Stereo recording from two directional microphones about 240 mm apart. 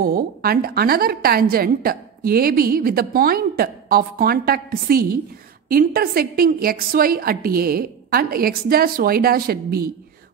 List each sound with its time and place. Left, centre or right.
0.0 s a woman's voice: right